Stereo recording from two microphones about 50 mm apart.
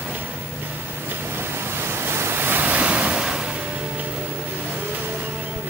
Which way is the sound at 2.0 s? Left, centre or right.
Right.